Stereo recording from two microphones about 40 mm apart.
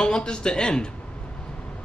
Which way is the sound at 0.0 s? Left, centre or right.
Left.